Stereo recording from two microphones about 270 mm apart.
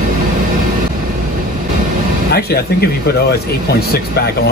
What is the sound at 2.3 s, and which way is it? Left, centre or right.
Speech, left.